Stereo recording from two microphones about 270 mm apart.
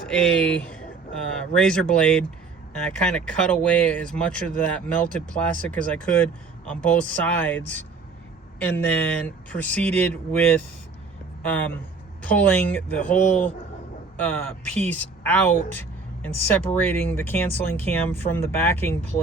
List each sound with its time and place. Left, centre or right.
0.0 s speech: centre